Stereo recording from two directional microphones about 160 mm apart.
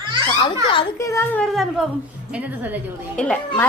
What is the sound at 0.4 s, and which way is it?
Speech, 30° left (ahead or behind).